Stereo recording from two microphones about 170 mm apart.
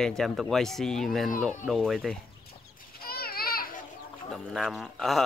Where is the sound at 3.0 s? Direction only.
60° left (ahead or behind).